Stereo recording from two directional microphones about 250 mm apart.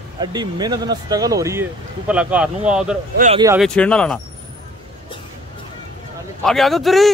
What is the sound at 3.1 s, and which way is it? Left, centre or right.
Speech, right.